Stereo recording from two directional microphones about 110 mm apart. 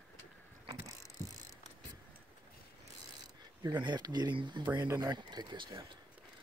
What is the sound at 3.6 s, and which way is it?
Speech, 40° right (ahead or behind).